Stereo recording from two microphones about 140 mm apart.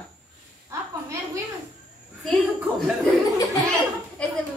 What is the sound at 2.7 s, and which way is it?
Speech, centre (ahead or behind).